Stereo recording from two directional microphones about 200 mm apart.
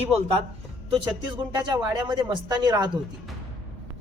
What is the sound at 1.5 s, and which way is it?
Speech, 20° right (ahead or behind).